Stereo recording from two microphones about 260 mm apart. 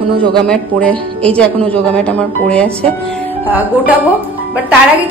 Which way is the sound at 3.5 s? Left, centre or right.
Centre.